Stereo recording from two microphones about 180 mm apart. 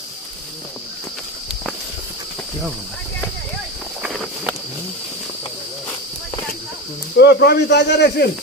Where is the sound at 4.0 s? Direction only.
5° right (ahead or behind).